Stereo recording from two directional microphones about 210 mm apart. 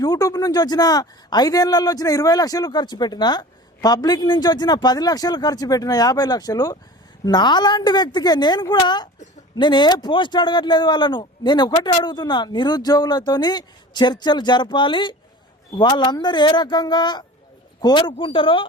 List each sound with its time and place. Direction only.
0.0 s a man's voice: 15° left (ahead or behind)